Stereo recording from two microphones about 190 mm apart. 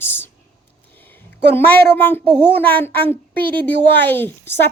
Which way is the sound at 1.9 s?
10° left (ahead or behind).